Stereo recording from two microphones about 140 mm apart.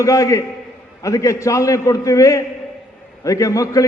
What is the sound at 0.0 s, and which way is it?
A man's voice, 25° left (ahead or behind).